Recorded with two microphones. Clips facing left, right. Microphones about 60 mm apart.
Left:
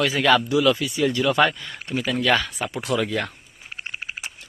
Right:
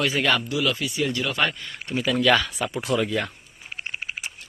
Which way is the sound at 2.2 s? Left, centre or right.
Left.